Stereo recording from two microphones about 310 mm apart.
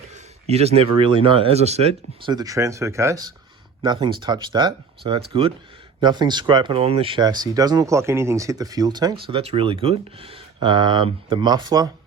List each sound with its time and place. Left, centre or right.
0.4 s speech: centre